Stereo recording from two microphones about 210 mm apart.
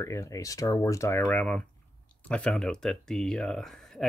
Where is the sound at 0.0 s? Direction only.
15° left (ahead or behind).